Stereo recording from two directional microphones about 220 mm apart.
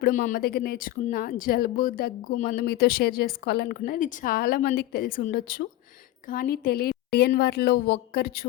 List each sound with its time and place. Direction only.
0.0 s a woman's voice: 35° left (ahead or behind)